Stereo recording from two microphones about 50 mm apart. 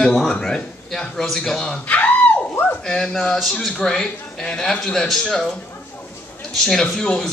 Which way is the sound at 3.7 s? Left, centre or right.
Centre.